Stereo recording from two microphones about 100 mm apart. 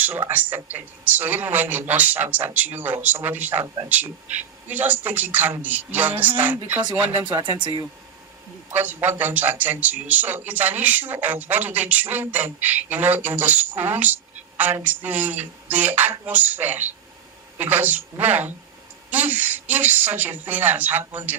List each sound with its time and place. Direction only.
0.0 s a man's voice: 20° right (ahead or behind)
7.4 s speech: 50° right (ahead or behind)
8.7 s a man's voice: 20° right (ahead or behind)